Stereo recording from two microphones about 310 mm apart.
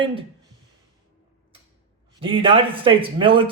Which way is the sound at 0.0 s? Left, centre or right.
Centre.